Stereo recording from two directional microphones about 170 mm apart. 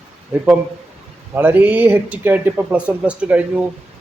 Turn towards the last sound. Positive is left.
turn(degrees=-5)  # may be behind; listen again after turning